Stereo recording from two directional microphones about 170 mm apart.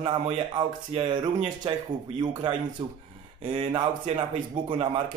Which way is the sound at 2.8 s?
35° right (ahead or behind).